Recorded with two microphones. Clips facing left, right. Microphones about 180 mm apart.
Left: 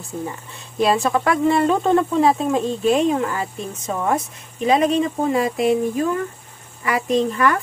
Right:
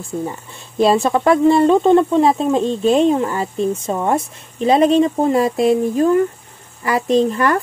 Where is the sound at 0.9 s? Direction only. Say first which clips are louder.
Right 5 dB; 25° right (ahead or behind).